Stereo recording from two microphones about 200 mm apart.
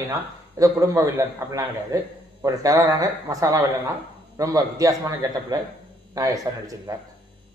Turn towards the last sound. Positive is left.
turn(degrees=-15)  # may be behind; listen again after turning